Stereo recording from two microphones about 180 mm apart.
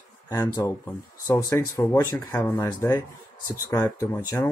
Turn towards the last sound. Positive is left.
turn(degrees=15)  # may be behind; listen again after turning